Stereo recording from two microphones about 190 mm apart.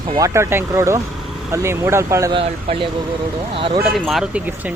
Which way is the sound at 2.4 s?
30° right (ahead or behind).